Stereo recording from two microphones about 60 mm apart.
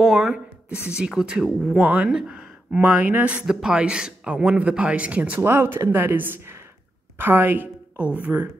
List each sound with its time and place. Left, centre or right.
0.0 s speech: centre; by 3.4 s right
3.4 s speech: centre
5.4 s speech: right
7.2 s a sound: right
8.2 s speech: right